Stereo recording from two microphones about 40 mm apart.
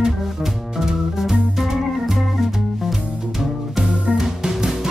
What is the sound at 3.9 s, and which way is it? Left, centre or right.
Music, right.